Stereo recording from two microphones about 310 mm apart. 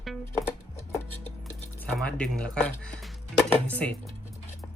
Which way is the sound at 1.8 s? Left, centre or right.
Centre.